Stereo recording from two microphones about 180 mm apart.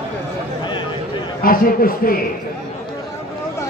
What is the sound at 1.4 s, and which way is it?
Speech, 55° left (ahead or behind).